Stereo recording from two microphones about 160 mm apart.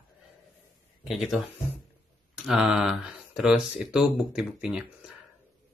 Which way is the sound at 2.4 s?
Centre (ahead or behind).